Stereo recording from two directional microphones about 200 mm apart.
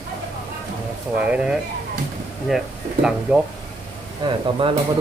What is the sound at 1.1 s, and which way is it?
Speech, 5° right (ahead or behind).